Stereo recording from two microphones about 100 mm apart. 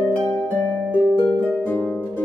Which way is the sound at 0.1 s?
15° left (ahead or behind).